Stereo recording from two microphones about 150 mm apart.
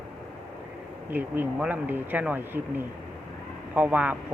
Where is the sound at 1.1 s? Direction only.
10° right (ahead or behind).